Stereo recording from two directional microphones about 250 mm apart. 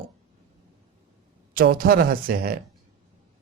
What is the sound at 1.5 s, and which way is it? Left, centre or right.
A man's voice, right.